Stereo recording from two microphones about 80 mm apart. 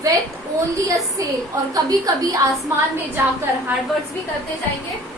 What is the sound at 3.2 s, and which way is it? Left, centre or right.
Speech, right.